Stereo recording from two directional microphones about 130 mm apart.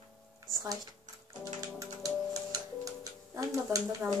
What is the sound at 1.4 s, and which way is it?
Music, 25° right (ahead or behind).